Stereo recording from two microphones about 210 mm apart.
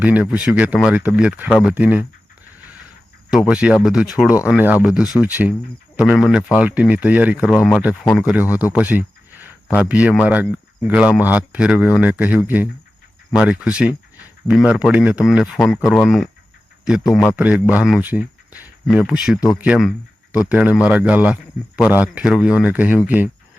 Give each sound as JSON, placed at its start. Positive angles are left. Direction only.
{"t": 0.0, "sound": "speech", "side_deg": -5}
{"t": 3.5, "sound": "speech", "side_deg": -5}
{"t": 8.7, "sound": "a sound", "side_deg": -5}
{"t": 9.9, "sound": "speech", "side_deg": -5}
{"t": 17.0, "sound": "a man's voice", "side_deg": 20}
{"t": 17.2, "sound": "speech", "side_deg": -5}